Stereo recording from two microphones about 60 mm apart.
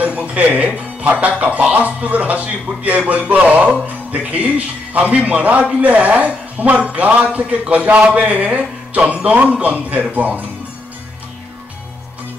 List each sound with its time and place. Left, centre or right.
0.0 s a man's voice: right